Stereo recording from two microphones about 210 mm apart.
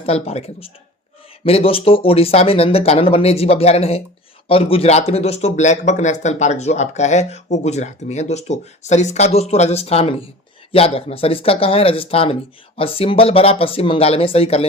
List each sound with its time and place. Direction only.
0.0 s speech: 30° left (ahead or behind)